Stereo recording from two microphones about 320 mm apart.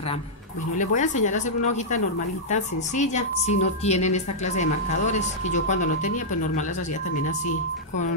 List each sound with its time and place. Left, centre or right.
0.7 s speech: left
2.5 s speech: left